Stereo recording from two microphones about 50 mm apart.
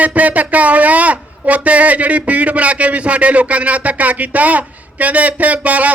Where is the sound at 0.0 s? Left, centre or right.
Right.